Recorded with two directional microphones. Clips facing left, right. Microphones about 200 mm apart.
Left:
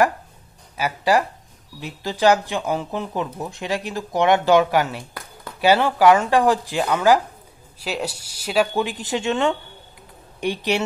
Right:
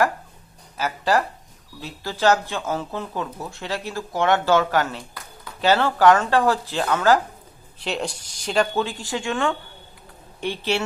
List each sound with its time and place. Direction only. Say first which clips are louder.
0.7 s speech: left 2 dB; 10° left (ahead or behind)